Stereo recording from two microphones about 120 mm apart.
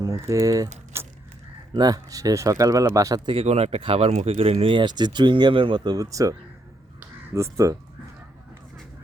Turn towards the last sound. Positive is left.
turn(degrees=-25)  # may be behind; listen again after turning